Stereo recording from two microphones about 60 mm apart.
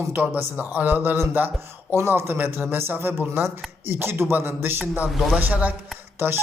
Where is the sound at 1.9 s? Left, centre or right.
Right.